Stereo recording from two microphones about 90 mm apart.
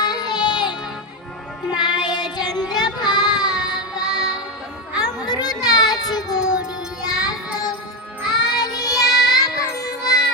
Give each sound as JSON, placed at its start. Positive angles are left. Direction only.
{"t": 0.0, "sound": "music", "side_deg": 50}
{"t": 1.9, "sound": "child singing", "side_deg": 55}
{"t": 4.9, "sound": "children playing", "side_deg": 50}
{"t": 7.0, "sound": "child singing", "side_deg": 50}
{"t": 8.3, "sound": "music", "side_deg": 45}
{"t": 8.9, "sound": "child singing", "side_deg": 0}
{"t": 9.3, "sound": "music", "side_deg": 45}